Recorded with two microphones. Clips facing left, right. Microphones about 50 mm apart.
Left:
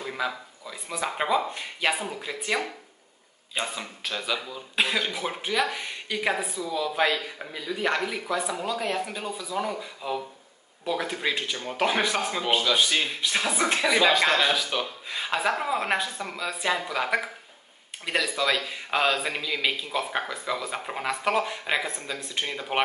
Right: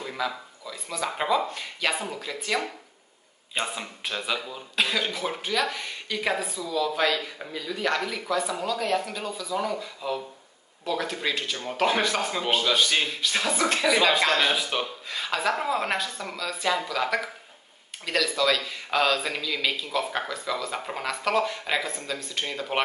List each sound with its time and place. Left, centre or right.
0.0 s speech: centre
3.5 s speech: centre
4.7 s speech: centre
14.4 s speech: centre
15.0 s speech: centre